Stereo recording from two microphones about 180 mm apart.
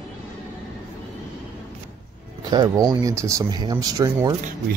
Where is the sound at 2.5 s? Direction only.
20° right (ahead or behind).